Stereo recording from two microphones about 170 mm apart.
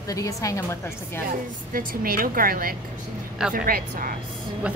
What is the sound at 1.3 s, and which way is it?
A woman's voice, 60° right (ahead or behind).